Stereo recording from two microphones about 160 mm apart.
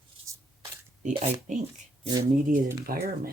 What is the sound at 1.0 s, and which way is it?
Speech, 50° right (ahead or behind).